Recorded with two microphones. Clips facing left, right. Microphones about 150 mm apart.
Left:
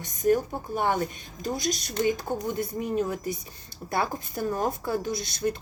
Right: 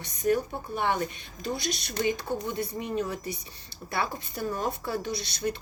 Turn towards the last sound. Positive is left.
turn(degrees=45)  # may be behind; listen again after turning